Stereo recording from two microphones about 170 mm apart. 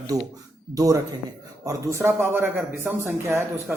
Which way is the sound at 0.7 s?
20° right (ahead or behind).